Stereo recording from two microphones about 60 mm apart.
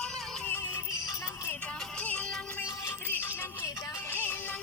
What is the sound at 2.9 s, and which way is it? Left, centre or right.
Music, left.